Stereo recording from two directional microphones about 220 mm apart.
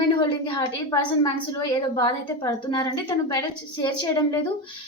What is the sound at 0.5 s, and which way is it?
A woman's voice, 15° left (ahead or behind).